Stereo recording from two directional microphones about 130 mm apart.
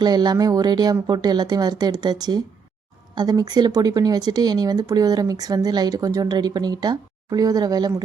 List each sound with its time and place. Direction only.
0.0 s speech: 35° right (ahead or behind)